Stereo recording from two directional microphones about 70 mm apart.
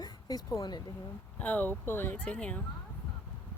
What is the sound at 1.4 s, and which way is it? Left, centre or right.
Speech, left.